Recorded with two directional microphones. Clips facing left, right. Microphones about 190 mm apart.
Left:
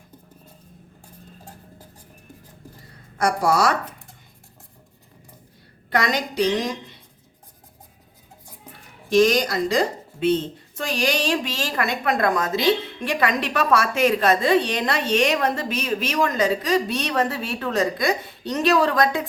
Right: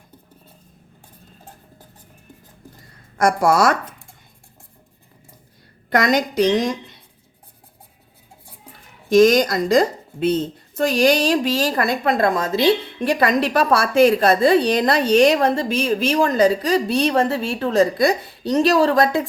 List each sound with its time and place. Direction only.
3.2 s a woman's voice: 50° right (ahead or behind)
5.9 s a woman's voice: 45° right (ahead or behind)
9.0 s a woman's voice: 45° right (ahead or behind)